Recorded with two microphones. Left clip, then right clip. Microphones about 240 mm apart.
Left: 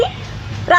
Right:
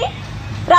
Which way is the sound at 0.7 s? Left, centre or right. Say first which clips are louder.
Right 1 dB; right.